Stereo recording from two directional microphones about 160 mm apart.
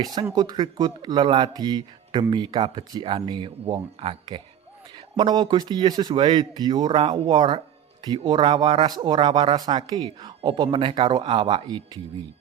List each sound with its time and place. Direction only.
0.0 s speech: 25° right (ahead or behind)